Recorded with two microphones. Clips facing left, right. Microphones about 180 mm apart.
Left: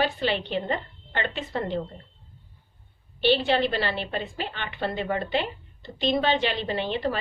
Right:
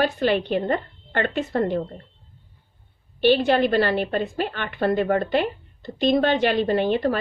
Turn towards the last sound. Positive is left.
turn(degrees=-50)  # may be behind; listen again after turning